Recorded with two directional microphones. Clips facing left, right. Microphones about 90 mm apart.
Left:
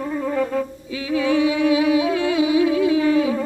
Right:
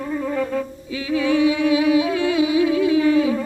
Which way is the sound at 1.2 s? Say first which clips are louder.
Even; 30° left (ahead or behind).